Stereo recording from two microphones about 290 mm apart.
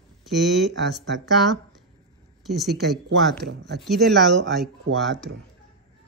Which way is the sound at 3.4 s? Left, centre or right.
Right.